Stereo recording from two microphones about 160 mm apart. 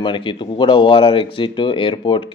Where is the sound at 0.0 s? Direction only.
30° left (ahead or behind).